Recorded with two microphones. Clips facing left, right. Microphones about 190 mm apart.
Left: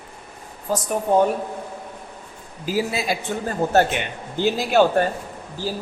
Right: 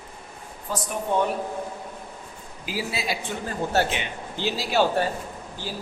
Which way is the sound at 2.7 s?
45° left (ahead or behind).